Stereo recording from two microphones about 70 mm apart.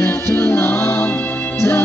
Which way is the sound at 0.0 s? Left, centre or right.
Left.